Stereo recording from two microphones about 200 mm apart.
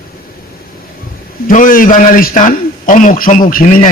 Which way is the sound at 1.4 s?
40° left (ahead or behind).